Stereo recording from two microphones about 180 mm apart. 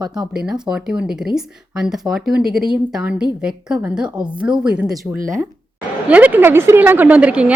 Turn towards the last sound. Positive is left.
turn(degrees=-5)  # may be behind; listen again after turning